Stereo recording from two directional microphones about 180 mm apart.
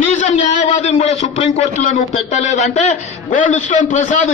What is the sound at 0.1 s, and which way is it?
A man's voice, 45° left (ahead or behind).